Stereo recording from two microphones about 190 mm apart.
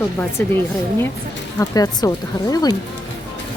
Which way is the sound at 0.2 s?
10° left (ahead or behind).